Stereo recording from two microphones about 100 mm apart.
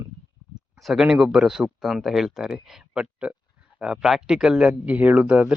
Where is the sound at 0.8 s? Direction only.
5° right (ahead or behind).